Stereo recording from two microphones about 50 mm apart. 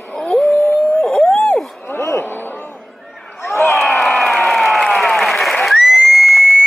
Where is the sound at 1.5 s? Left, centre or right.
Centre.